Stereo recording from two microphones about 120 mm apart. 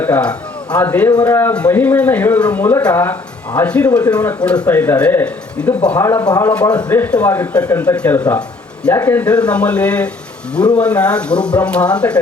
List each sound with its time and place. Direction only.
0.0 s a man's voice: 10° left (ahead or behind)
6.0 s speech: 25° left (ahead or behind)
6.5 s speech: 10° left (ahead or behind)